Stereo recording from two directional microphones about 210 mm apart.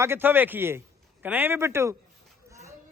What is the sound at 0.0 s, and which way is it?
Speech, 10° right (ahead or behind).